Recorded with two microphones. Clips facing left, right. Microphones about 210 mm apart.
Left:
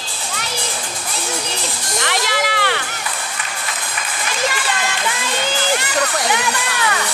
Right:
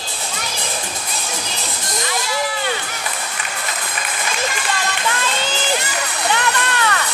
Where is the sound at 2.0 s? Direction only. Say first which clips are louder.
Left 2 dB; 80° left.